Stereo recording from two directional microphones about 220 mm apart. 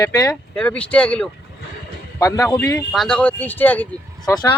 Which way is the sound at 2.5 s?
5° left (ahead or behind).